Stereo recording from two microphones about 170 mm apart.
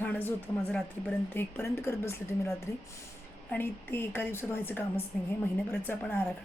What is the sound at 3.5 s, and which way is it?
Speech, 15° left (ahead or behind).